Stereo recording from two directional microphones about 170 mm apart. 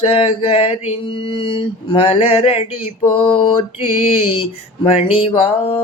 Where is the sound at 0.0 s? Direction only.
35° left (ahead or behind).